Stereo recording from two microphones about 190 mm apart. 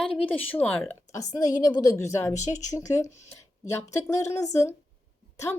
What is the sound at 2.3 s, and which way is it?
Speech, 40° left (ahead or behind).